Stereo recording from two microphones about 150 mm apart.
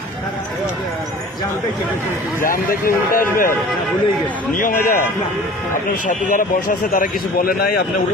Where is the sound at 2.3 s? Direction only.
70° left (ahead or behind).